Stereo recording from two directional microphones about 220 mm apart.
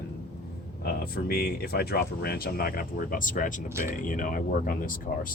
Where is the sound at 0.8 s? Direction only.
45° left (ahead or behind).